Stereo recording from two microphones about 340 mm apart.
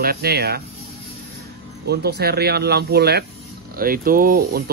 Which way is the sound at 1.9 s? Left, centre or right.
Right.